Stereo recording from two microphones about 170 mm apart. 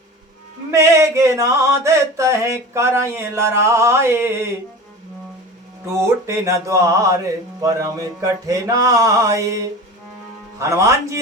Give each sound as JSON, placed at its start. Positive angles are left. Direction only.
{"t": 0.7, "sound": "mantra", "side_deg": -15}
{"t": 5.8, "sound": "a sound", "side_deg": -15}
{"t": 10.6, "sound": "speech", "side_deg": -20}